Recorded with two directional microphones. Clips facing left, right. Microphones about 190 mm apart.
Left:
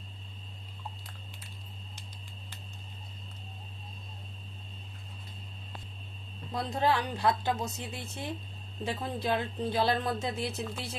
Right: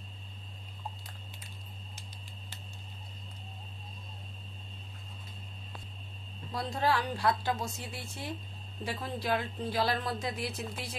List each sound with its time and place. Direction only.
6.5 s a woman's voice: 20° left (ahead or behind)